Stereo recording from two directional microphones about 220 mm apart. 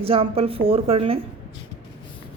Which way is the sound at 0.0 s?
25° right (ahead or behind).